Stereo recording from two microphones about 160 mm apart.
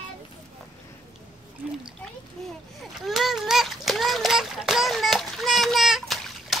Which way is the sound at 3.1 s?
Centre (ahead or behind).